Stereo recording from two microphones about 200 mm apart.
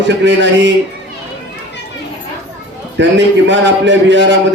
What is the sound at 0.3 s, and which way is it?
Speech, 65° right (ahead or behind).